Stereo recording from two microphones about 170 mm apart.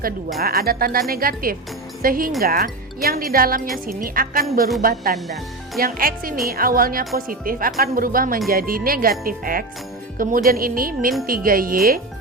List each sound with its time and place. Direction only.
0.3 s a woman's voice: 65° right (ahead or behind)